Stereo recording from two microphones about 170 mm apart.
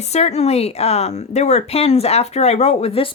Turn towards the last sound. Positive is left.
turn(degrees=35)  # may be behind; listen again after turning